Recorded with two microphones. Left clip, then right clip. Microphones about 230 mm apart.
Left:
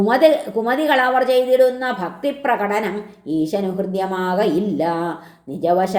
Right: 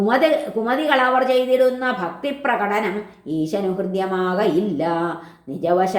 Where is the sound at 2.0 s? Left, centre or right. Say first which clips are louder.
Left 2 dB; left.